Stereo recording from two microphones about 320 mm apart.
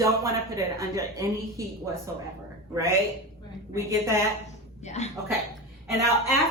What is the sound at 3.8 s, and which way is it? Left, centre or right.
Speech, centre.